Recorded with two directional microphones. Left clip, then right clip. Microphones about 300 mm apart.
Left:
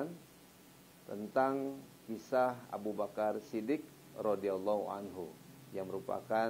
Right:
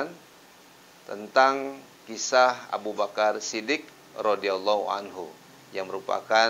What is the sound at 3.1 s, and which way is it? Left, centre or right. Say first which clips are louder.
A man's voice: right 13 dB; centre.